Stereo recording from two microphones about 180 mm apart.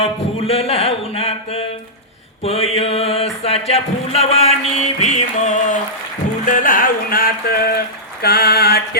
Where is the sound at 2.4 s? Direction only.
35° left (ahead or behind).